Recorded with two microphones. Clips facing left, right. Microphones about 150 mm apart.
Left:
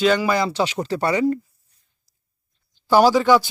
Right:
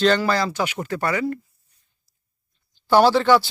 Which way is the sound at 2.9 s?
10° left (ahead or behind).